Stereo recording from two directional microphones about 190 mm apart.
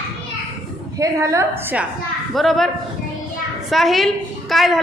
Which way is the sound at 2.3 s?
Centre (ahead or behind).